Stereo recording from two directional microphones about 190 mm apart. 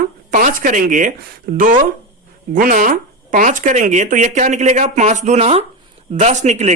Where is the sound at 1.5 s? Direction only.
55° right (ahead or behind).